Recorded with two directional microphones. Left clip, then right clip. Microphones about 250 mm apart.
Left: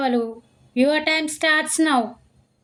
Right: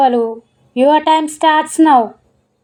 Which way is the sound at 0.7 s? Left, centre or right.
Centre.